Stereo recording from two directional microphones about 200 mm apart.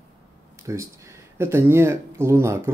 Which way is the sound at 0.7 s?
15° right (ahead or behind).